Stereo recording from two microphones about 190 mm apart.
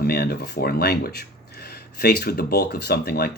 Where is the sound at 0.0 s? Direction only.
55° left (ahead or behind).